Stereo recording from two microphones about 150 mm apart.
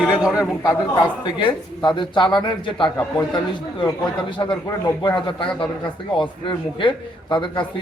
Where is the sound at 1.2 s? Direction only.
30° left (ahead or behind).